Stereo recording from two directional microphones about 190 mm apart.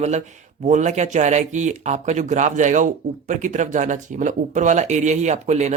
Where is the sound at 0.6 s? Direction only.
40° right (ahead or behind).